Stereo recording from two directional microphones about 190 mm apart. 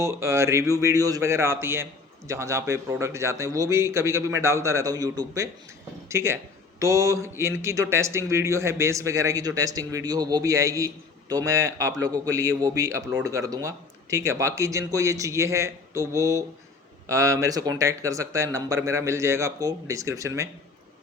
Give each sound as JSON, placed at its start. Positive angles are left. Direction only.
{"t": 0.0, "sound": "a man's voice", "side_deg": -15}